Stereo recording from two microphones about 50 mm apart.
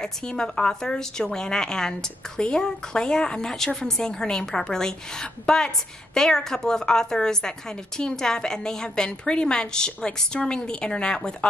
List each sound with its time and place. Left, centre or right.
0.0 s a woman's voice: centre